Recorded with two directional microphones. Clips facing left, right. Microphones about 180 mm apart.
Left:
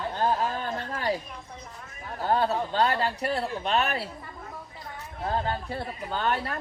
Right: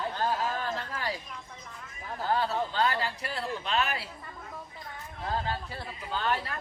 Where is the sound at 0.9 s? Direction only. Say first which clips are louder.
Left 6 dB; 35° left (ahead or behind).